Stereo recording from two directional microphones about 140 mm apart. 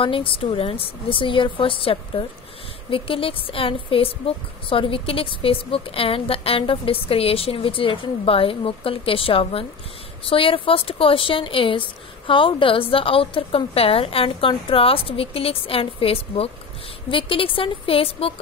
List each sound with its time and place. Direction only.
0.0 s speech: 40° left (ahead or behind)